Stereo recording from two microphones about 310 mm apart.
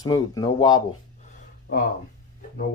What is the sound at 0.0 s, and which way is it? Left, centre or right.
Speech, centre.